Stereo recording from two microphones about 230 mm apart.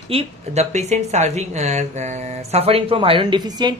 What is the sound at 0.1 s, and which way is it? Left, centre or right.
Speech, right.